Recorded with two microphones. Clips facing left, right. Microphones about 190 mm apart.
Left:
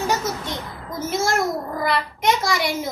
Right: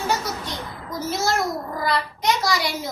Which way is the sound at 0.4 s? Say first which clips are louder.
Left 2 dB; 25° left (ahead or behind).